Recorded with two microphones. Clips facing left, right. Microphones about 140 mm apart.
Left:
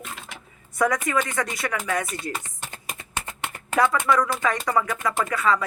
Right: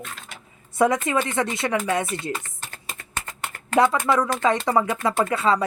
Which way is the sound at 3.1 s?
15° left (ahead or behind).